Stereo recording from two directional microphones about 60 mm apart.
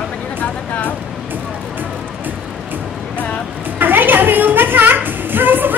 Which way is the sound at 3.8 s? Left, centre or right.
Right.